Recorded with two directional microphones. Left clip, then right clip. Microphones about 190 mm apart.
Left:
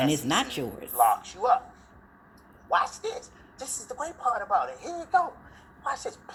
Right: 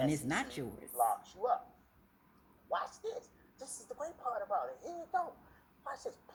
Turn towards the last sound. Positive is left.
turn(degrees=20)  # may be behind; listen again after turning